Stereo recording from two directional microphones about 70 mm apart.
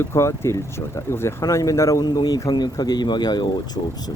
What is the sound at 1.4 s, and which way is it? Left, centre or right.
Speech, left.